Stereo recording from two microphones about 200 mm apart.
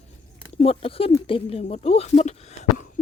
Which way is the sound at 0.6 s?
30° left (ahead or behind).